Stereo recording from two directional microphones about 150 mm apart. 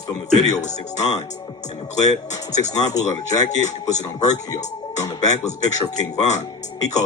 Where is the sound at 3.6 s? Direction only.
50° left (ahead or behind).